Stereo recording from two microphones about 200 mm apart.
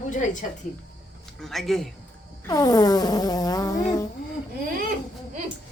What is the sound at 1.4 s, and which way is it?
Speech, centre (ahead or behind).